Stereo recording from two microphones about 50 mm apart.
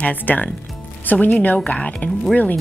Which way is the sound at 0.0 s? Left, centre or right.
Left.